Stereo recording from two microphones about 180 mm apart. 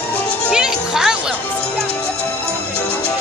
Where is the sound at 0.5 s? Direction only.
5° right (ahead or behind).